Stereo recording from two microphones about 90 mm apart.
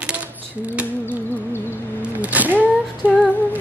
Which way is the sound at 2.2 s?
20° right (ahead or behind).